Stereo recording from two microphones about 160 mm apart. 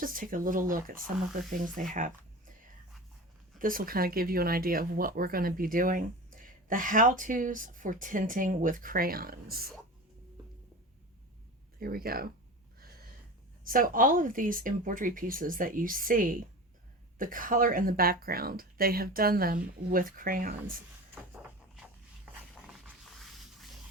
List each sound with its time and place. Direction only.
0.0 s speech: 60° right (ahead or behind)
3.6 s speech: 60° right (ahead or behind)
11.8 s speech: 70° right (ahead or behind)
13.7 s speech: 60° right (ahead or behind)
23.1 s a sound: centre (ahead or behind)